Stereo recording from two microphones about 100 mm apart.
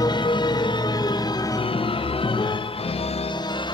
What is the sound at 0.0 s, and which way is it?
Music, 50° left (ahead or behind).